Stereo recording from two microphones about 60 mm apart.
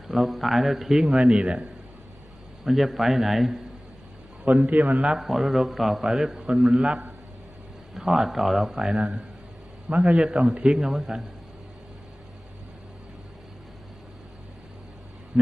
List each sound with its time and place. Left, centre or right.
0.1 s a man's voice: centre
2.6 s a man's voice: centre
4.4 s a man's voice: right
5.2 s a man's voice: centre